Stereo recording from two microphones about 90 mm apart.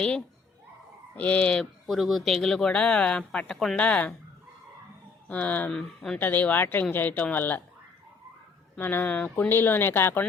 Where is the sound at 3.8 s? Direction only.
15° left (ahead or behind).